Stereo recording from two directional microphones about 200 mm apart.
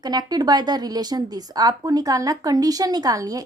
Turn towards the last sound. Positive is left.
turn(degrees=-20)  # may be behind; listen again after turning